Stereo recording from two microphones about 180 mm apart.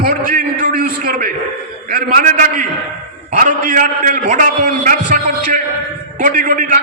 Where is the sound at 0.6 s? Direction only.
55° right (ahead or behind).